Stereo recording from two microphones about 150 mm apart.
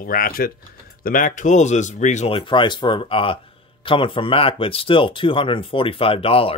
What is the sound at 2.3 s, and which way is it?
Speech, 35° left (ahead or behind).